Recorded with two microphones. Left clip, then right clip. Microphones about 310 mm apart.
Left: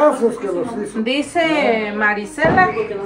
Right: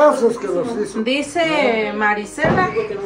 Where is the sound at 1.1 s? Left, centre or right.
Centre.